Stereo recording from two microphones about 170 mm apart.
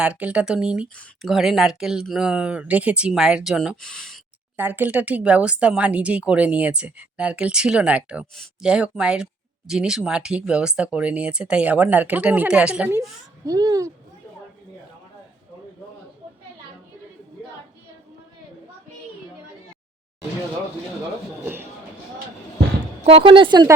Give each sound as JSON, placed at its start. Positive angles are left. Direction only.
{"t": 0.0, "sound": "speech", "side_deg": -10}
{"t": 4.5, "sound": "speech", "side_deg": -10}
{"t": 13.4, "sound": "speech", "side_deg": -20}
{"t": 21.4, "sound": "a sound", "side_deg": -10}
{"t": 23.0, "sound": "speech", "side_deg": -35}